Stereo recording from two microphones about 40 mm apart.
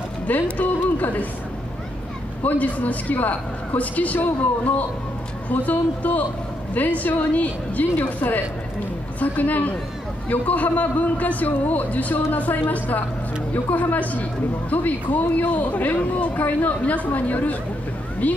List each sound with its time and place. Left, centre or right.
0.3 s a woman's voice: left
2.4 s a woman's voice: left